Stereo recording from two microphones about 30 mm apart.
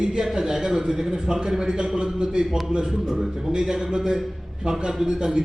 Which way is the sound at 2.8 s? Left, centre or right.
Centre.